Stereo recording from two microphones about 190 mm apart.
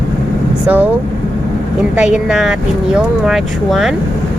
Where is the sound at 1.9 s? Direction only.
5° right (ahead or behind).